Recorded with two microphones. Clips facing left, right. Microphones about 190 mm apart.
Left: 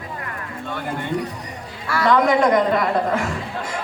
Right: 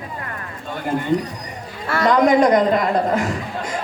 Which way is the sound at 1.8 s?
25° right (ahead or behind).